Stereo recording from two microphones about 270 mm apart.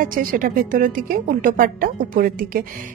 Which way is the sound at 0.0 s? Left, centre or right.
Right.